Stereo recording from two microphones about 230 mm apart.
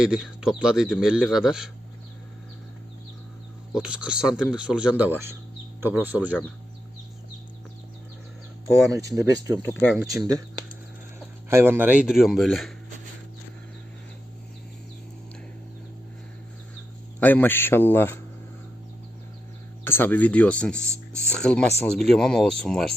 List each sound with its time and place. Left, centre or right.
0.0 s a man's voice: centre
3.7 s a man's voice: centre
9.0 s speech: centre
9.8 s a man's voice: centre
11.4 s a man's voice: centre
17.2 s speech: centre
19.8 s a man's voice: centre